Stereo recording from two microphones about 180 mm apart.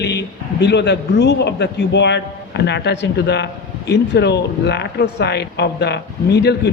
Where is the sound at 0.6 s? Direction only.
70° left (ahead or behind).